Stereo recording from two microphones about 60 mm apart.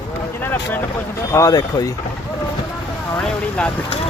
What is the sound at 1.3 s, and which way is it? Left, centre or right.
Speech, left.